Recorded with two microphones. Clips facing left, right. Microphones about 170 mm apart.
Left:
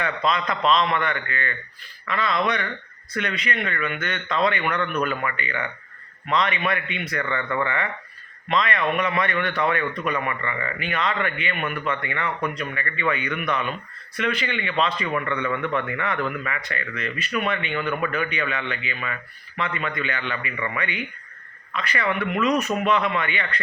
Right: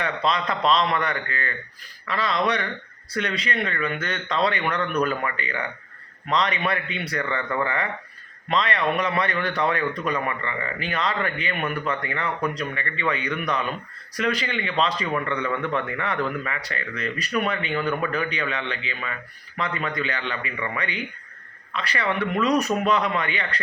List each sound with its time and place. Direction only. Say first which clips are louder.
0.3 s a man's voice: even; 35° right (ahead or behind)